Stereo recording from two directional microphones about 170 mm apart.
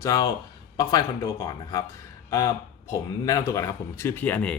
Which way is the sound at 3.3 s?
20° left (ahead or behind).